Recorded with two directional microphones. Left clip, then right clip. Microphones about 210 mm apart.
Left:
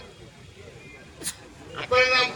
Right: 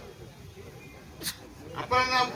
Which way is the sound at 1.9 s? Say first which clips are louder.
Left 5 dB; 40° right (ahead or behind).